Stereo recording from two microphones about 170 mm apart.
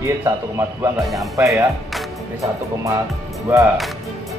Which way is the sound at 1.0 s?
Centre (ahead or behind).